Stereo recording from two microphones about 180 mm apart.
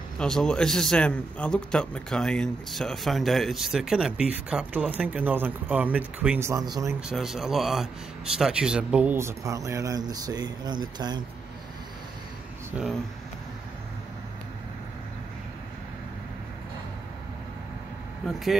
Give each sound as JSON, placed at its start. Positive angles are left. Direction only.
{"t": 0.2, "sound": "a man's voice", "side_deg": 5}
{"t": 7.0, "sound": "a man's voice", "side_deg": -5}
{"t": 12.7, "sound": "a man's voice", "side_deg": -5}
{"t": 18.2, "sound": "a man's voice", "side_deg": 0}